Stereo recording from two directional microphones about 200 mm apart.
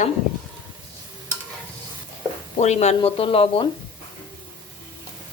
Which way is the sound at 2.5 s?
35° left (ahead or behind).